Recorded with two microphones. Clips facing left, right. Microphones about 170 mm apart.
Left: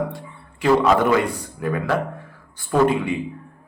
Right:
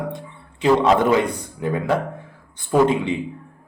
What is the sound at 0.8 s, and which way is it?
A man's voice, 25° right (ahead or behind).